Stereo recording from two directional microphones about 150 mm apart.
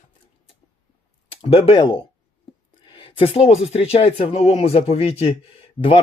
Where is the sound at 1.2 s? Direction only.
40° left (ahead or behind).